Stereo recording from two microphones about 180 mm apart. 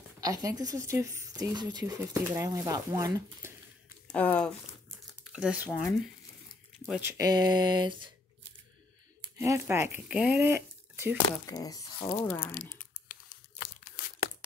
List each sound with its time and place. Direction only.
0.2 s speech: 20° right (ahead or behind)
4.1 s speech: 5° left (ahead or behind)
5.3 s speech: 5° right (ahead or behind)
5.7 s speech: 5° left (ahead or behind)
7.0 s speech: 15° right (ahead or behind)
9.4 s speech: 15° right (ahead or behind)
11.4 s speech: 20° left (ahead or behind)
12.4 s speech: 10° left (ahead or behind)
13.1 s crumpling: 50° left (ahead or behind)